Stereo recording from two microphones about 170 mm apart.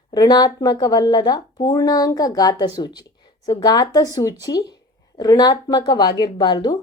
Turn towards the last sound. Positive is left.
turn(degrees=25)  # may be behind; listen again after turning